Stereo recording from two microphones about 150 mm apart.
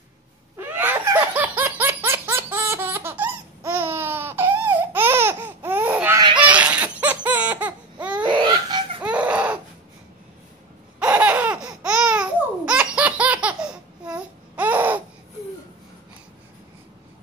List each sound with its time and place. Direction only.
0.6 s a sound: 15° right (ahead or behind)
1.3 s laughter: 10° right (ahead or behind)
8.2 s laughter: 30° right (ahead or behind)
9.0 s baby cry: 10° right (ahead or behind)
11.0 s laughter: 10° right (ahead or behind)